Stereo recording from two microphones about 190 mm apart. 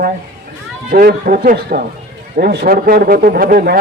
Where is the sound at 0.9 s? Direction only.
50° right (ahead or behind).